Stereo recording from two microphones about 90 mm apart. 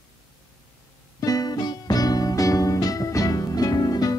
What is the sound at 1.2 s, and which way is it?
Music, 45° left (ahead or behind).